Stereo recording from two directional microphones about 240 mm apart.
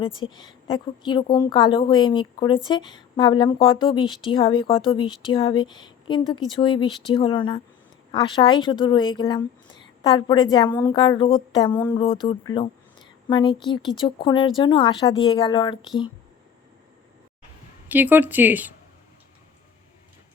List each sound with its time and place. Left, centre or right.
0.0 s speech: centre
11.7 s a sound: centre
11.9 s speech: centre
17.8 s speech: centre